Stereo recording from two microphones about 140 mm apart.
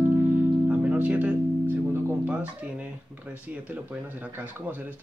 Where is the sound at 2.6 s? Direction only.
10° right (ahead or behind).